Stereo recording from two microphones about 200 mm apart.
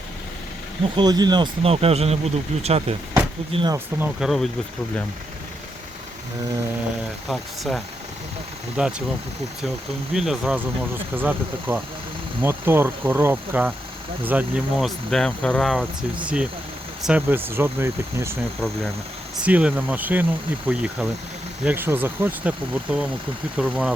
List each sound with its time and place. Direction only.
0.9 s speech: 20° right (ahead or behind)
4.0 s speech: centre (ahead or behind)
7.3 s speech: centre (ahead or behind)
10.2 s speech: centre (ahead or behind)
19.4 s speech: 5° right (ahead or behind)